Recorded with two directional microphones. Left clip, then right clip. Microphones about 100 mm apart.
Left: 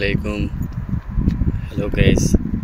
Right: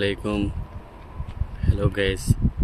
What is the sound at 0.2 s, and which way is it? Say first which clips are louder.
Speech: left 1 dB; 30° right (ahead or behind).